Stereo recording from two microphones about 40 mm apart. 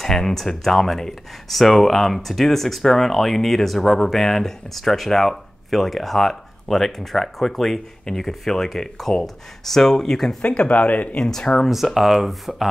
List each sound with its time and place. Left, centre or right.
0.0 s speech: centre
10.4 s speech: left
11.1 s speech: centre
11.6 s speech: centre